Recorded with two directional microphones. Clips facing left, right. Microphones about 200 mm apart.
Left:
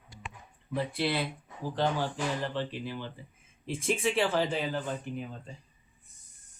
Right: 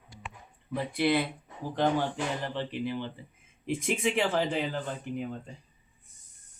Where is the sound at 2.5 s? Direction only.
15° right (ahead or behind).